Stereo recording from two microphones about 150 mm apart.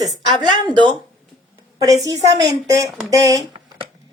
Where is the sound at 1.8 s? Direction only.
25° right (ahead or behind).